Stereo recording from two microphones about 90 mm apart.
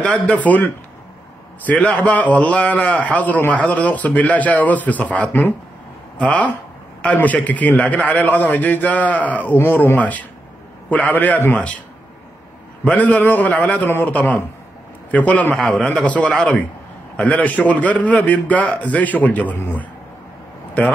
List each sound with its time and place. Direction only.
0.0 s a man's voice: 15° left (ahead or behind)
1.7 s a man's voice: 15° left (ahead or behind)
12.8 s a man's voice: 15° left (ahead or behind)